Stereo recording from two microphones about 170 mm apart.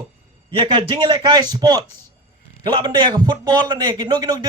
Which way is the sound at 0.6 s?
25° right (ahead or behind).